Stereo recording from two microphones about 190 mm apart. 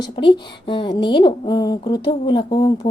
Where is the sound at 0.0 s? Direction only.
25° left (ahead or behind).